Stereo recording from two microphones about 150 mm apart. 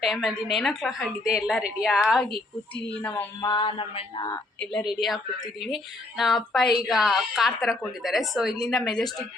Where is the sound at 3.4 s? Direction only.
30° left (ahead or behind).